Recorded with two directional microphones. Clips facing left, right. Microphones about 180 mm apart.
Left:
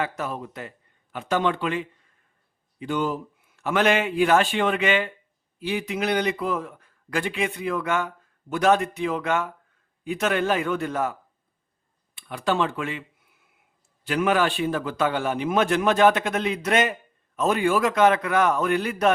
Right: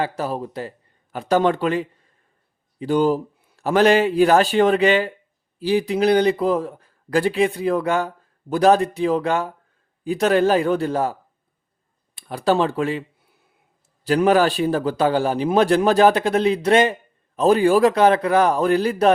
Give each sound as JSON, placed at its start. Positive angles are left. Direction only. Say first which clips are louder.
{"t": 0.0, "sound": "a man's voice", "louder": "right 5 dB", "side_deg": -35}